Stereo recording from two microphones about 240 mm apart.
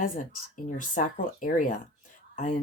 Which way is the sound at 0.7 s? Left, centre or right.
Left.